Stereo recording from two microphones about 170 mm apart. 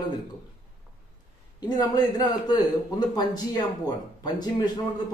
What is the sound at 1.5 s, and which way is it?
A man's voice, 25° left (ahead or behind).